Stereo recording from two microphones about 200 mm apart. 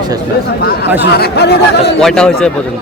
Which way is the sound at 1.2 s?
55° left (ahead or behind).